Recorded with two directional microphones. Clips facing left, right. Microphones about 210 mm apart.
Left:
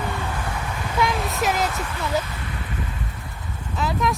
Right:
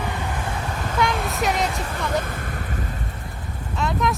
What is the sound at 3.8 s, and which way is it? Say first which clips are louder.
Speech: even; centre (ahead or behind).